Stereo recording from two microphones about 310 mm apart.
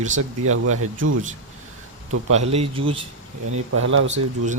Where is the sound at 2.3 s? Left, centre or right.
Centre.